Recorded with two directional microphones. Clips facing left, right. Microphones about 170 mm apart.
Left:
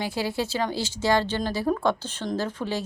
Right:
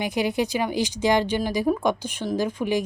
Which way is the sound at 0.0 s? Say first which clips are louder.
Right 4 dB; 20° right (ahead or behind).